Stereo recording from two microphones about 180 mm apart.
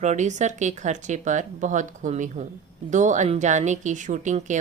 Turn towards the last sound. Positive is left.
turn(degrees=-40)  # may be behind; listen again after turning